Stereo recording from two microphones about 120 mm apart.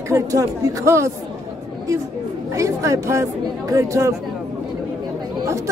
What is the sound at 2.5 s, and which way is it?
Speech, 25° right (ahead or behind).